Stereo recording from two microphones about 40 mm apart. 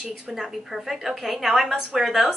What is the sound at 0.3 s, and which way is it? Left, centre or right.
A woman's voice, centre.